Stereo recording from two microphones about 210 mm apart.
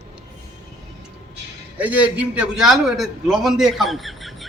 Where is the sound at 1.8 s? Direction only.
5° right (ahead or behind).